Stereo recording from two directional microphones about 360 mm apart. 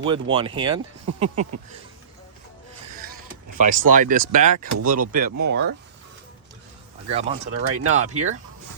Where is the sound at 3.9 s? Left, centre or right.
Right.